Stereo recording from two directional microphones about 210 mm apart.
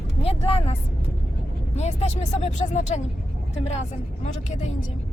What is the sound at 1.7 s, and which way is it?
Speech, 30° left (ahead or behind).